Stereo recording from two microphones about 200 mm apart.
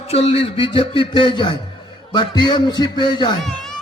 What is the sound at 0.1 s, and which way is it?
A man's voice, 30° left (ahead or behind).